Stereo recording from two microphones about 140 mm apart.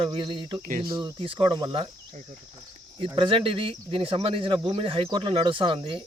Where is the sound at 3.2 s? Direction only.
40° right (ahead or behind).